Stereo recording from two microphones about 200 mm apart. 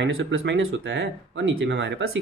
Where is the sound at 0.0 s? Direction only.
65° right (ahead or behind).